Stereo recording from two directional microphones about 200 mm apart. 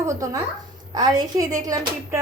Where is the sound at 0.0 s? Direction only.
15° right (ahead or behind).